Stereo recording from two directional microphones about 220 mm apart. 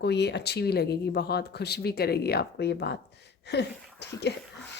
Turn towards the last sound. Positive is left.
turn(degrees=50)  # may be behind; listen again after turning